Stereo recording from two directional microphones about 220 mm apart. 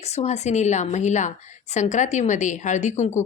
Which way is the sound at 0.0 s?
30° left (ahead or behind).